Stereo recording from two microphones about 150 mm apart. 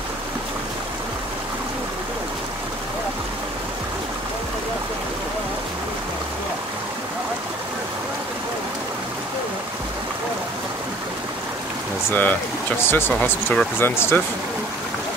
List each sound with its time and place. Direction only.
12.1 s speech: 10° left (ahead or behind)